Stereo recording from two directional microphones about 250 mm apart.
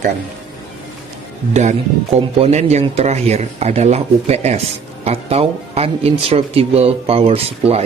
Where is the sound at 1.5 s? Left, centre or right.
Right.